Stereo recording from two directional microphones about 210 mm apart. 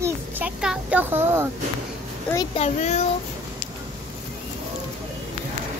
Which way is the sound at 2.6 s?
30° left (ahead or behind).